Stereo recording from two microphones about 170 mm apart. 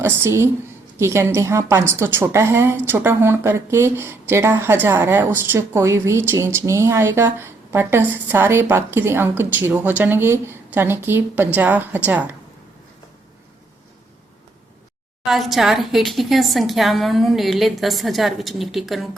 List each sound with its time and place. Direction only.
0.0 s a woman's voice: 15° right (ahead or behind)
15.3 s speech: centre (ahead or behind)